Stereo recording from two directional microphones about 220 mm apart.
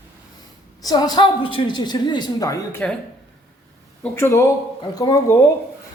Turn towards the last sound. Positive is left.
turn(degrees=15)  # may be behind; listen again after turning